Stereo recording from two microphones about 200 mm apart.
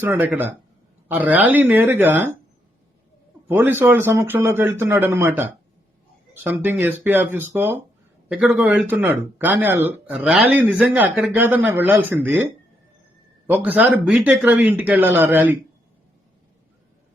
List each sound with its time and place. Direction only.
0.0 s speech: 10° right (ahead or behind)
3.5 s speech: 10° right (ahead or behind)